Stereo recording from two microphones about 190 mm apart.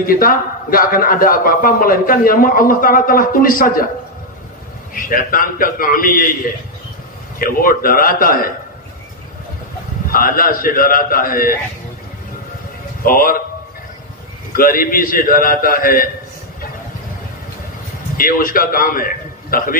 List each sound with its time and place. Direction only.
0.0 s a man's voice: 50° left (ahead or behind)
4.9 s a man's voice: 45° left (ahead or behind)
7.3 s a man's voice: 50° left (ahead or behind)
10.1 s a man's voice: 50° left (ahead or behind)
13.0 s a man's voice: 50° left (ahead or behind)
14.6 s a man's voice: 50° left (ahead or behind)
18.1 s a man's voice: 50° left (ahead or behind)